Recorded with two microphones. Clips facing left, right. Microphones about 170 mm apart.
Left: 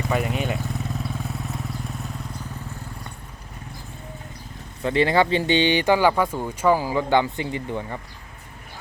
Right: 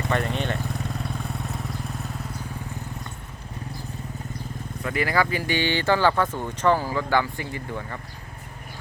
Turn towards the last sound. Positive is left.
turn(degrees=20)  # may be behind; listen again after turning